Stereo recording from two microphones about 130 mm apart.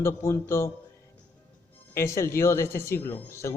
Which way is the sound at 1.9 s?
25° left (ahead or behind).